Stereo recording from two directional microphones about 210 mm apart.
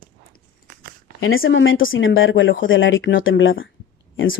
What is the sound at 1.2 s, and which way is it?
Speech, 70° left (ahead or behind).